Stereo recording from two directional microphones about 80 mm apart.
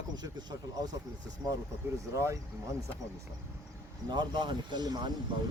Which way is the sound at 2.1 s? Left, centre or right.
Right.